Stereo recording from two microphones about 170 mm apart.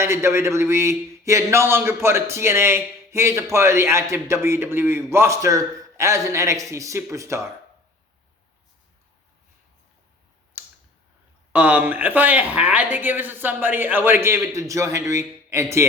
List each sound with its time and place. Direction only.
0.0 s speech: 15° right (ahead or behind)
10.5 s computer keyboard: 10° right (ahead or behind)
11.5 s speech: 10° right (ahead or behind)